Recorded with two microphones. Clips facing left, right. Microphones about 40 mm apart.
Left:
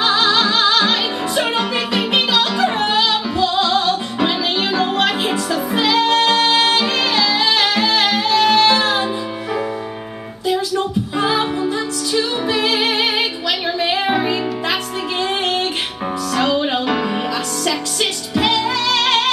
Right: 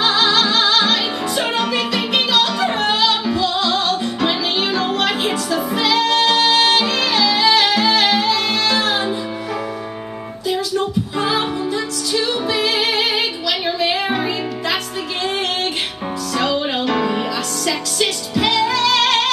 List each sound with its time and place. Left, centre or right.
0.3 s music: left
11.1 s a capella: centre
12.4 s music: left
14.0 s music: centre
16.3 s music: left
16.9 s music: centre
17.6 s music: left